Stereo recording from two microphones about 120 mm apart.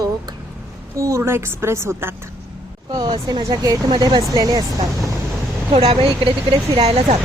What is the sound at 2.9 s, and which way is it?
Speech, 35° right (ahead or behind).